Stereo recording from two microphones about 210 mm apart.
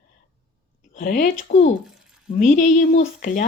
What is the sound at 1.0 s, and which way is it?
Speech, 40° left (ahead or behind).